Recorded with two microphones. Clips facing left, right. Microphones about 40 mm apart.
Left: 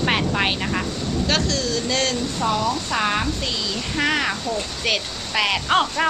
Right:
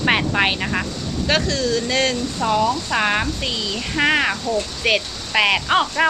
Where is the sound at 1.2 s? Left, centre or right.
Right.